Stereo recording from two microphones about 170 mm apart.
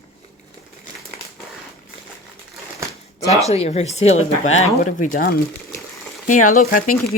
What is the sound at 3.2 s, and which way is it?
Speech, 40° left (ahead or behind).